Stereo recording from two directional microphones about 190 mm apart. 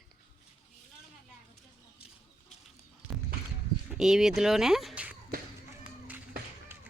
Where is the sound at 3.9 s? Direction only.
5° right (ahead or behind).